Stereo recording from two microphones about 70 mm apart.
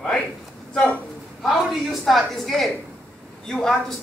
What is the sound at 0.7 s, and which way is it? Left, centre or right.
Speech, centre.